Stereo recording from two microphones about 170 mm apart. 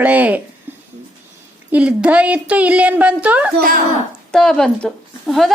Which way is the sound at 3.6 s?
55° right (ahead or behind).